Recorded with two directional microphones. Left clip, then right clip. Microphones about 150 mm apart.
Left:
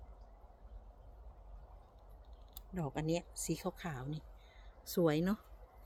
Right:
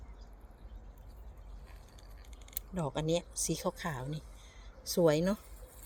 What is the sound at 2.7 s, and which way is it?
Speech, 10° left (ahead or behind).